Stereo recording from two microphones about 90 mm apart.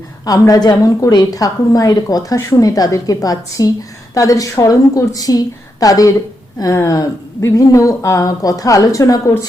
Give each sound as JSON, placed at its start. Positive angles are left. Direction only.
{"t": 0.3, "sound": "a woman's voice", "side_deg": 40}